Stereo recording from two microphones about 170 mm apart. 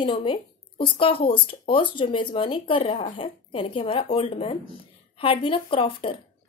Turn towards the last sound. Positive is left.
turn(degrees=30)  # may be behind; listen again after turning